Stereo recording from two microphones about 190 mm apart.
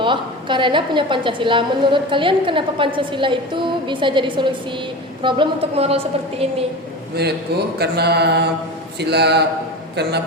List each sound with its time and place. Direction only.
0.0 s a woman's voice: 25° right (ahead or behind)
7.2 s mantra: 60° right (ahead or behind)
9.9 s a man's voice: 60° right (ahead or behind)